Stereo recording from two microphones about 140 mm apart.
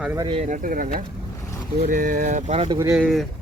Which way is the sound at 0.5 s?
80° right.